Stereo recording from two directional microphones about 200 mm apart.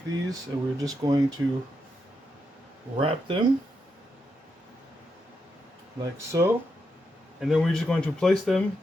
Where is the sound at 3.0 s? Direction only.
25° right (ahead or behind).